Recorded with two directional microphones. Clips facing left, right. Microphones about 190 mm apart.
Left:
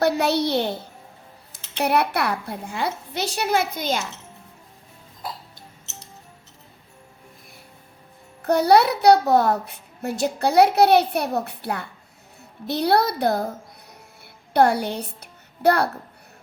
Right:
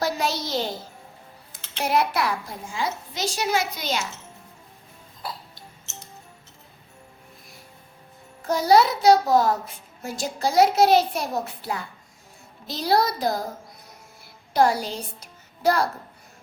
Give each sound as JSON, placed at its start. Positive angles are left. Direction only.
{"t": 0.0, "sound": "a child's voice", "side_deg": 65}
{"t": 8.4, "sound": "a child's voice", "side_deg": 65}
{"t": 14.5, "sound": "a child's voice", "side_deg": 60}